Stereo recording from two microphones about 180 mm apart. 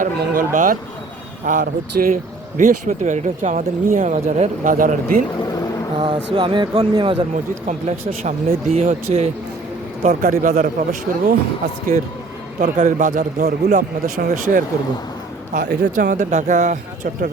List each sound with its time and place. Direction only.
0.0 s speech: 50° right (ahead or behind)
6.0 s speech: 25° right (ahead or behind)
8.7 s speech: 35° right (ahead or behind)
10.0 s speech: 50° right (ahead or behind)
15.5 s speech: 70° right (ahead or behind)
16.0 s speech: 45° right (ahead or behind)